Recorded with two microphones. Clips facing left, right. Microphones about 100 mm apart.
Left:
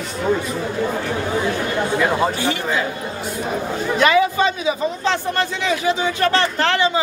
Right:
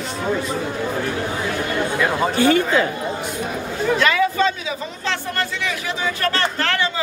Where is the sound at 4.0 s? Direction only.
20° left (ahead or behind).